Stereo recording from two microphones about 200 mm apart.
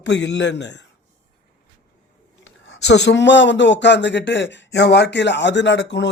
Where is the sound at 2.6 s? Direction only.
65° left (ahead or behind).